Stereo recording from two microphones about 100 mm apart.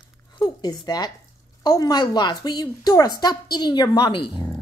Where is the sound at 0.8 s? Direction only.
40° left (ahead or behind).